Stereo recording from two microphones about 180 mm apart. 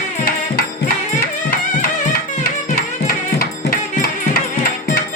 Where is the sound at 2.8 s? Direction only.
55° left (ahead or behind).